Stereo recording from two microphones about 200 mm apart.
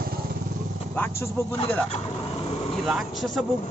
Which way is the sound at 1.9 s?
30° left (ahead or behind).